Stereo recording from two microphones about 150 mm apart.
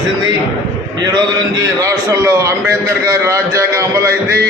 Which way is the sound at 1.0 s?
25° right (ahead or behind).